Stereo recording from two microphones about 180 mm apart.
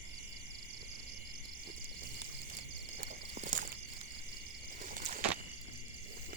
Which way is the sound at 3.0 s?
50° right (ahead or behind).